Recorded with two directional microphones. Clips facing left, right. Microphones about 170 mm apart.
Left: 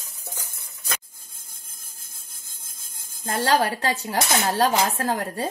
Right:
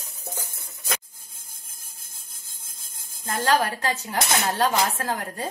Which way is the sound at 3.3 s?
30° left (ahead or behind).